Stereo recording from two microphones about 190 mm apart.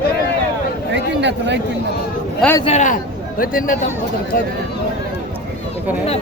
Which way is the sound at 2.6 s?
35° left (ahead or behind).